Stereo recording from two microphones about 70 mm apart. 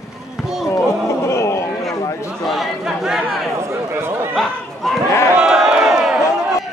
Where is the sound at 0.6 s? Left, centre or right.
Left.